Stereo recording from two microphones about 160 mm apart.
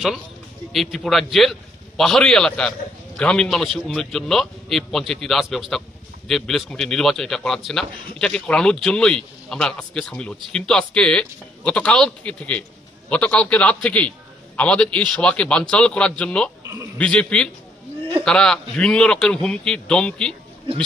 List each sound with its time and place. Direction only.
0.7 s a man's voice: centre (ahead or behind)
16.6 s a man's voice: 15° right (ahead or behind)
17.0 s a man's voice: 5° left (ahead or behind)